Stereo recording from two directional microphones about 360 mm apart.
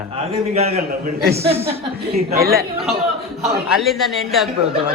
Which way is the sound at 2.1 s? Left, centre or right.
Right.